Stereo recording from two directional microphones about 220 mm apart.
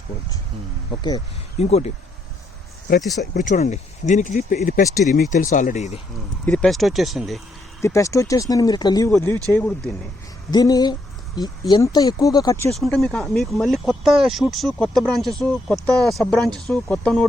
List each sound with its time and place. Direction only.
1.5 s speech: 30° left (ahead or behind)
3.3 s speech: 35° left (ahead or behind)
6.4 s speech: 5° left (ahead or behind)
7.8 s speech: 15° left (ahead or behind)
12.7 s speech: centre (ahead or behind)